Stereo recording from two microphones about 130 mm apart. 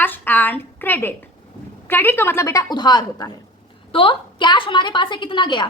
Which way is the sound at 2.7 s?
30° left (ahead or behind).